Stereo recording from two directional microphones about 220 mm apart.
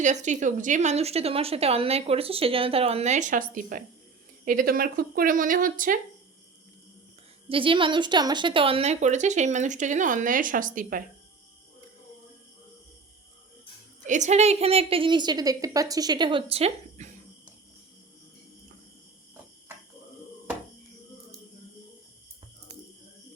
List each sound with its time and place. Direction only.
0.0 s a woman's voice: 35° right (ahead or behind)
7.4 s a woman's voice: 25° right (ahead or behind)
14.1 s speech: 30° right (ahead or behind)